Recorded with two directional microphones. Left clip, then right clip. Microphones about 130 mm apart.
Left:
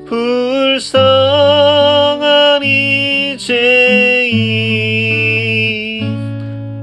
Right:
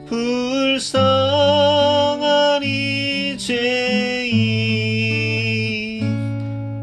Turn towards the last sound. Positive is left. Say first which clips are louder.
# left 8 dB
turn(degrees=-55)  # may be behind; listen again after turning